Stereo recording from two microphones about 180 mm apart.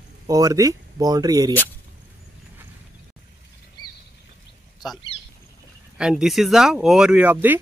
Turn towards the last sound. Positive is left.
turn(degrees=-10)  # may be behind; listen again after turning